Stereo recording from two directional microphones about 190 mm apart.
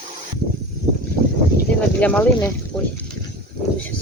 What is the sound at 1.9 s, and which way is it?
Speech, 5° left (ahead or behind).